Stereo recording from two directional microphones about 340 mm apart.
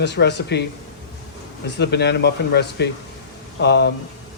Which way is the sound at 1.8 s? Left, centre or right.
Left.